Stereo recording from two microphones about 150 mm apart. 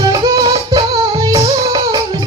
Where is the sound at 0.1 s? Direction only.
30° right (ahead or behind).